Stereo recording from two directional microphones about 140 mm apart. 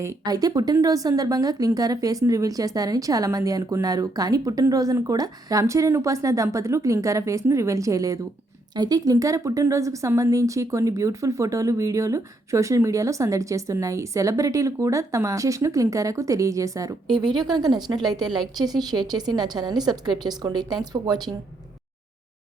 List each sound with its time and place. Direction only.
0.0 s a woman's voice: 25° right (ahead or behind)